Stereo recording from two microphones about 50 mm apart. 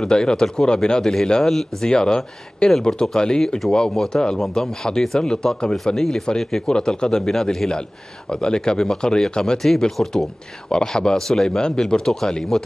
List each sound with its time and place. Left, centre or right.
0.0 s a man's voice: centre